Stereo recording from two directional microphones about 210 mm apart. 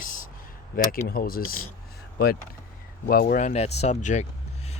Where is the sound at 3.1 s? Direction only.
40° left (ahead or behind).